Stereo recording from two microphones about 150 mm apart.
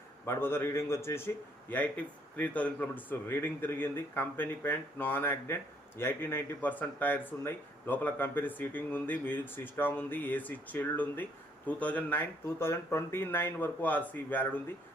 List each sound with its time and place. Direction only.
0.3 s speech: 15° left (ahead or behind)